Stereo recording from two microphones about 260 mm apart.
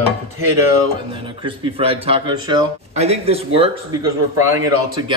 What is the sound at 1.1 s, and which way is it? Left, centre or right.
A man's voice, centre.